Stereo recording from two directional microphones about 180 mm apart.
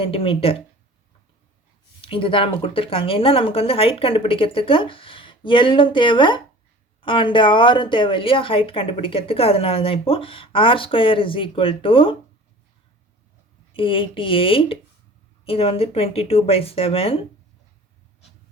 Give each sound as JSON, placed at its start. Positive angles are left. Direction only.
{"t": 0.0, "sound": "speech", "side_deg": 30}
{"t": 2.0, "sound": "speech", "side_deg": 30}
{"t": 13.7, "sound": "speech", "side_deg": 30}